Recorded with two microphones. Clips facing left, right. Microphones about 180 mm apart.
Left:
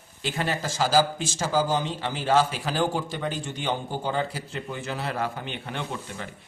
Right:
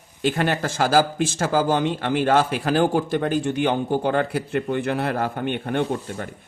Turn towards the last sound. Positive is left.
turn(degrees=-50)  # may be behind; listen again after turning